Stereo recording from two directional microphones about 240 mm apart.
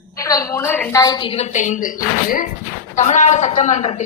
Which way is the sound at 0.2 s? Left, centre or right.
Centre.